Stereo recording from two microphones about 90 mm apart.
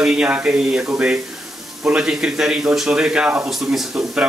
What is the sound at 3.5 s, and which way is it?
Speech, 5° right (ahead or behind).